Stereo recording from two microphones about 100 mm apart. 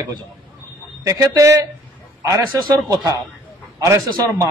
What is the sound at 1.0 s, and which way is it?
Speech, 35° right (ahead or behind).